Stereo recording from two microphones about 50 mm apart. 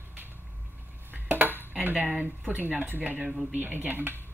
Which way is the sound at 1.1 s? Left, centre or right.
Right.